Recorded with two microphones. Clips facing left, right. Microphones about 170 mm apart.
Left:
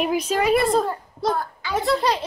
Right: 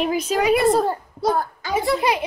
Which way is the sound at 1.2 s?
45° right (ahead or behind).